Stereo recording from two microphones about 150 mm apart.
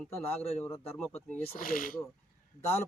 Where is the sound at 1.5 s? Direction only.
70° left (ahead or behind).